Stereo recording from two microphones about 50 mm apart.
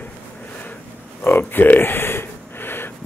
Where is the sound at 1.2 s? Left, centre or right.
Left.